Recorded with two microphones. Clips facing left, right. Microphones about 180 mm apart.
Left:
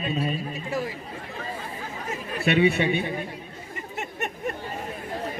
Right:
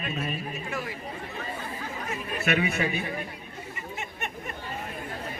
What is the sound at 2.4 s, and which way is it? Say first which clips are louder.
Speech: left 6 dB; 30° left (ahead or behind).